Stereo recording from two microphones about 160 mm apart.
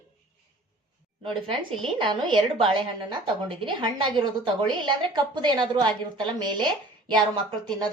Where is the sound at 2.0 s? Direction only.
30° right (ahead or behind).